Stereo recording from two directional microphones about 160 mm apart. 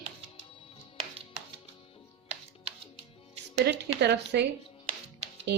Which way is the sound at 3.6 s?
90° right.